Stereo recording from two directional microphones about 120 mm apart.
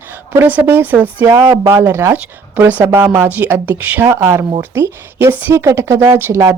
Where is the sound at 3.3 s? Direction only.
15° right (ahead or behind).